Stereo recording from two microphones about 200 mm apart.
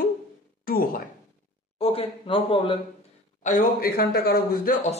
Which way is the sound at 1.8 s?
30° left (ahead or behind).